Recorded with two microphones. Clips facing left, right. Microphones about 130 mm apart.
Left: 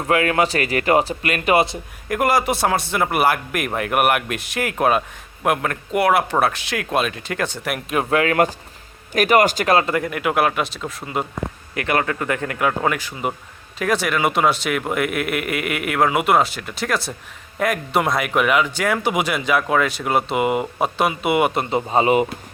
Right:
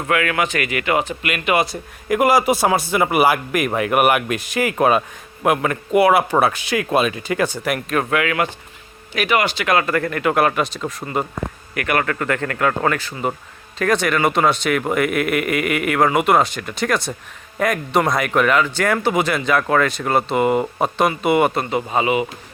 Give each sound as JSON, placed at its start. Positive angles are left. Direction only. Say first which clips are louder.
{"t": 0.1, "sound": "speech", "louder": "left 2 dB", "side_deg": 30}
{"t": 2.0, "sound": "a man's voice", "louder": "right 3 dB", "side_deg": -5}
{"t": 8.1, "sound": "speech", "louder": "left 7 dB", "side_deg": 35}
{"t": 9.7, "sound": "a man's voice", "louder": "even", "side_deg": 20}
{"t": 11.7, "sound": "a man's voice", "louder": "even", "side_deg": 25}
{"t": 21.5, "sound": "speech", "louder": "left 1 dB", "side_deg": 20}
{"t": 22.0, "sound": "speech", "louder": "left 2 dB", "side_deg": 40}